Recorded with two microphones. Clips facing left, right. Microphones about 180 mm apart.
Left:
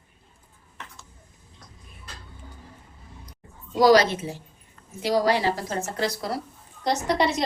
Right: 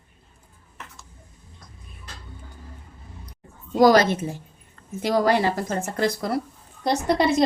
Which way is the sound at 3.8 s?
50° right (ahead or behind).